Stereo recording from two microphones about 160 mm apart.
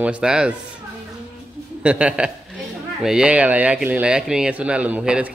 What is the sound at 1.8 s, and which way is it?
A man's voice, 5° right (ahead or behind).